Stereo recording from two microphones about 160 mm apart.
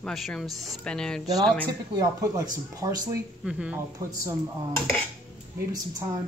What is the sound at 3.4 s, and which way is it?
Speech, 5° right (ahead or behind).